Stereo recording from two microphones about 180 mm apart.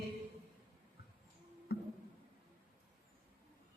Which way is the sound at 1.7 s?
60° left (ahead or behind).